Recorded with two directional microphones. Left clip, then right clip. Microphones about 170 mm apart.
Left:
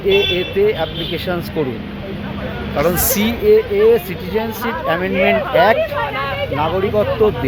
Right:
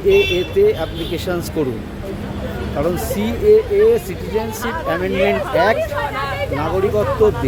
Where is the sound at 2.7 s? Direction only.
5° right (ahead or behind).